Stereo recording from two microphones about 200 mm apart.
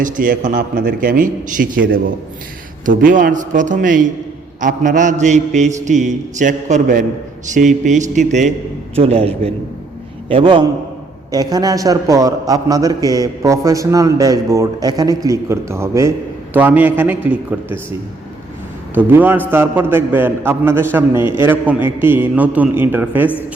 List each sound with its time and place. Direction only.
0.0 s a man's voice: 40° right (ahead or behind); by 17.7 s 5° right (ahead or behind)
18.9 s a man's voice: 10° right (ahead or behind)